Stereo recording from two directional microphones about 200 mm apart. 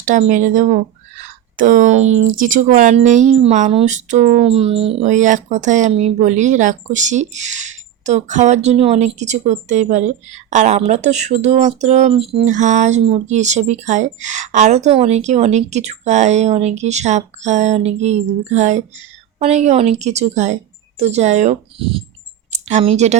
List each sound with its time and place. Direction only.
0.0 s speech: 40° right (ahead or behind)